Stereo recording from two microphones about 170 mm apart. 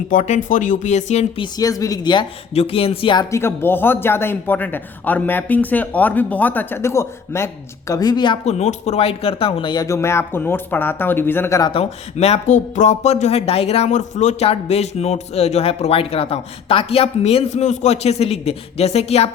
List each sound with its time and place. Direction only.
0.1 s speech: 50° left (ahead or behind)
1.4 s speech: 20° left (ahead or behind)
3.3 s speech: 15° left (ahead or behind)
8.4 s speech: 40° left (ahead or behind); by 11.7 s 15° left (ahead or behind)
11.7 s speech: 35° left (ahead or behind)